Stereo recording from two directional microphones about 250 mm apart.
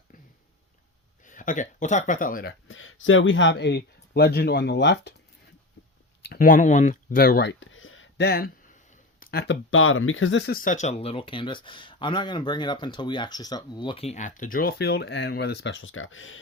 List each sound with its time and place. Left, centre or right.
1.2 s speech: left
6.2 s speech: left